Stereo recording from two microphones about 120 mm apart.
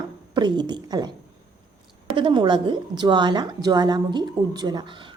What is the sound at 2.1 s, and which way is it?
A woman's voice, 40° right (ahead or behind).